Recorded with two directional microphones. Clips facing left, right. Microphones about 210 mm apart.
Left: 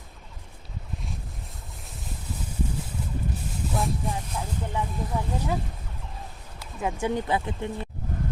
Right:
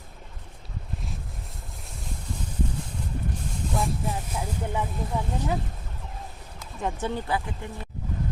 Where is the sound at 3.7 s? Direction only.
Centre (ahead or behind).